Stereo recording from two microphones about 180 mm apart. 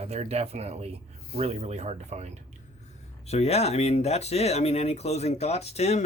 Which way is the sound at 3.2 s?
35° left (ahead or behind).